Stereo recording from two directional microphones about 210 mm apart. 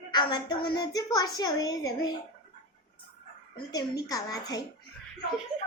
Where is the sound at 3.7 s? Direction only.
15° left (ahead or behind).